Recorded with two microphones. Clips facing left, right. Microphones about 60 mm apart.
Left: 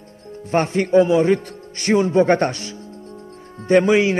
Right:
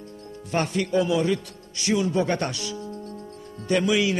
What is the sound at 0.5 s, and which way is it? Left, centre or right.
A man's voice, left.